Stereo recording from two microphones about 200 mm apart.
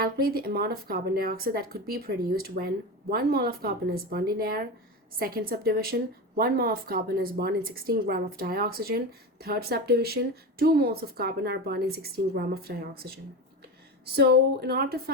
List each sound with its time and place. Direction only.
0.0 s a woman's voice: 50° right (ahead or behind)